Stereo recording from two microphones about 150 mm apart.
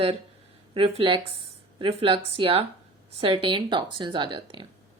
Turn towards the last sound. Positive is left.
turn(degrees=-35)  # may be behind; listen again after turning